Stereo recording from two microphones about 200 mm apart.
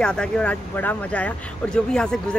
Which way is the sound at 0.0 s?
5° left (ahead or behind).